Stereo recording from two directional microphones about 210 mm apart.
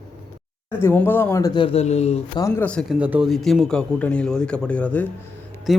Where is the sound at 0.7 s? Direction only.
10° left (ahead or behind); by 2.4 s 30° left (ahead or behind).